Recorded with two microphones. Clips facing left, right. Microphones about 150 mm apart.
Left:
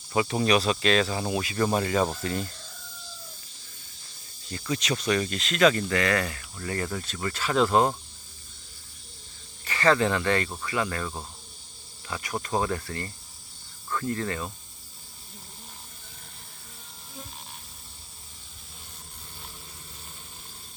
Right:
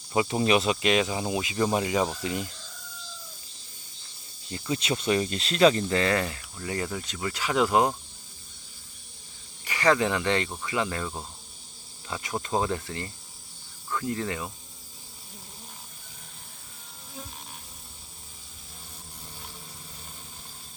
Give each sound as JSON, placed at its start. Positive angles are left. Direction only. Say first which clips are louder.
{"t": 0.1, "sound": "speech", "louder": "even", "side_deg": -20}
{"t": 4.4, "sound": "speech", "louder": "even", "side_deg": -20}
{"t": 9.6, "sound": "speech", "louder": "left 1 dB", "side_deg": -15}
{"t": 12.0, "sound": "speech", "louder": "even", "side_deg": -20}